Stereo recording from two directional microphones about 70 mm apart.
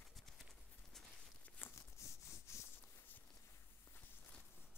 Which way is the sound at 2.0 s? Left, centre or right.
Left.